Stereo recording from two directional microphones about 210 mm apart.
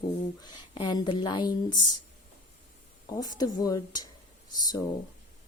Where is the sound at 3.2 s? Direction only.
20° left (ahead or behind).